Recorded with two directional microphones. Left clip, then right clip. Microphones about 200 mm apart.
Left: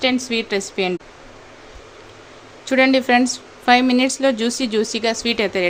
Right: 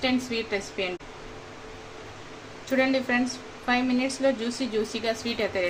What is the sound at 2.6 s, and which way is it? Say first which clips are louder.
A woman's voice: left 9 dB; 60° left (ahead or behind).